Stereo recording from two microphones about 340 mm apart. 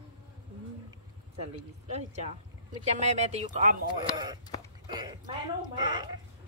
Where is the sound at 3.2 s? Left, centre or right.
Centre.